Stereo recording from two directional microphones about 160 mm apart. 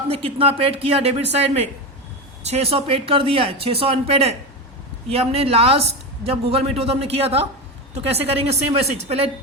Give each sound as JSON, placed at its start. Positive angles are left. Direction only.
{"t": 0.1, "sound": "speech", "side_deg": -35}